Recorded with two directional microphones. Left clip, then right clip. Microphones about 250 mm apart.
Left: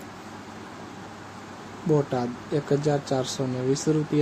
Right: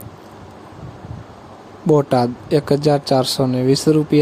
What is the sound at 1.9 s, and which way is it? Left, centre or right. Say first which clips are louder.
Speech: right 10 dB; right.